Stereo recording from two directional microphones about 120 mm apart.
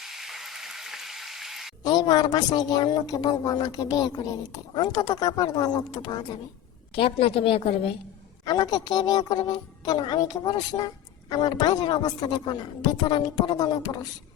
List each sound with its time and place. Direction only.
0.0 s a sound: centre (ahead or behind)
1.8 s a woman's voice: 35° left (ahead or behind)
6.9 s a woman's voice: 50° left (ahead or behind)
8.4 s a woman's voice: 35° left (ahead or behind)